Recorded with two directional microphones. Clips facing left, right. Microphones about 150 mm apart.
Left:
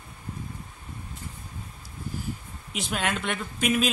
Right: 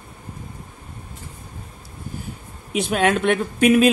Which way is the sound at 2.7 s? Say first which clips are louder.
Right 10 dB; 65° right (ahead or behind).